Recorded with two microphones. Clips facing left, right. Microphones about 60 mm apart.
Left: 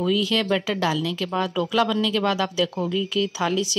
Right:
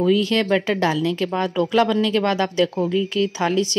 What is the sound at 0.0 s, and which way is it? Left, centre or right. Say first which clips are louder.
Speech: right 4 dB; right.